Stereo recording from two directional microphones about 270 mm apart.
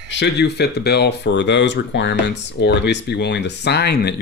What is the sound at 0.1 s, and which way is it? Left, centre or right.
Speech, left.